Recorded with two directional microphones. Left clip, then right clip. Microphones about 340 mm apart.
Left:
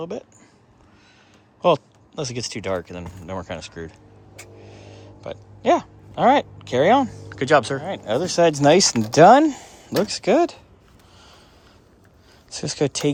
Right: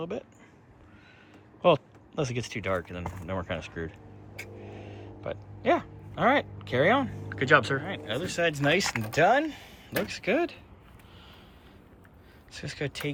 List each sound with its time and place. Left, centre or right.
0.0 s speech: centre
1.6 s speech: centre
9.2 s speech: left
9.5 s a sound: centre
10.1 s speech: centre
12.5 s speech: centre